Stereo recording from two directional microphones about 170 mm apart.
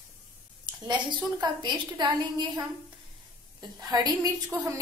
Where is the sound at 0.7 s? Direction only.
25° right (ahead or behind).